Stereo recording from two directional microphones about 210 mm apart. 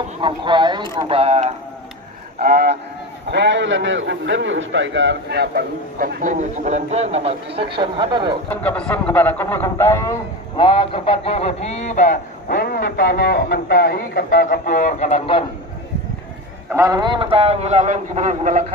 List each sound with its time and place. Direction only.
0.2 s speech: 20° right (ahead or behind)
2.3 s a man's voice: 45° right (ahead or behind); by 8.4 s 20° right (ahead or behind)
8.5 s speech: 5° left (ahead or behind)
10.6 s a man's voice: 25° left (ahead or behind)
16.7 s a man's voice: 15° right (ahead or behind); by 18.7 s 35° right (ahead or behind)